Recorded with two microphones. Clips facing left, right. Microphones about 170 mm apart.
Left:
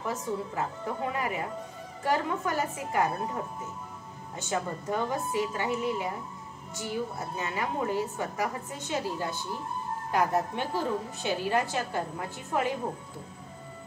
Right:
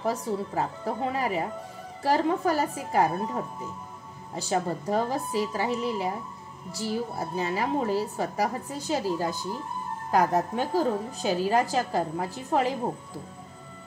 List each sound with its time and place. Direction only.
0.0 s a woman's voice: 35° right (ahead or behind)
4.4 s a woman's voice: 35° right (ahead or behind)